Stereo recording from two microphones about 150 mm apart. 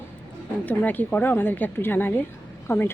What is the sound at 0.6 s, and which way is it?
A woman's voice, 10° left (ahead or behind).